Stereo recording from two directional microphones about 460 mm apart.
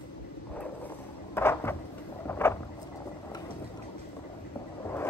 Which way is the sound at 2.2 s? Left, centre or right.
Centre.